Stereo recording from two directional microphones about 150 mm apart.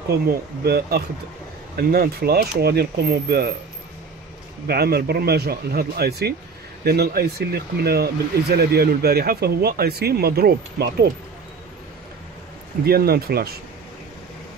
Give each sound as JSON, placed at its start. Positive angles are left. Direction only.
{"t": 0.7, "sound": "speech", "side_deg": -90}
{"t": 4.6, "sound": "speech", "side_deg": -90}
{"t": 12.8, "sound": "speech", "side_deg": -90}